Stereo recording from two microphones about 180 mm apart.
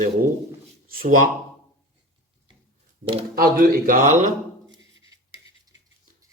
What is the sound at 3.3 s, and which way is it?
Speech, 55° right (ahead or behind).